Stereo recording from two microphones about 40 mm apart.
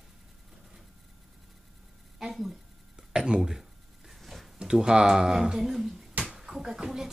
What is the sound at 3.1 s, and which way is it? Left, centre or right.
Speech, right.